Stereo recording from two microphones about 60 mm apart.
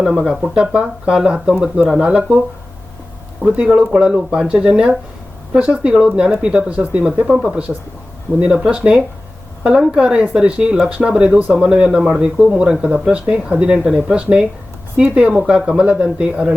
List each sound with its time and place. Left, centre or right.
0.2 s speech: centre
3.4 s speech: centre